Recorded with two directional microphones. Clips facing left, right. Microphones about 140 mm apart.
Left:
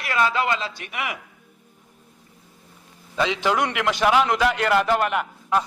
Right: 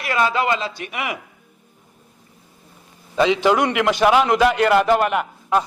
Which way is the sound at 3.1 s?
15° right (ahead or behind).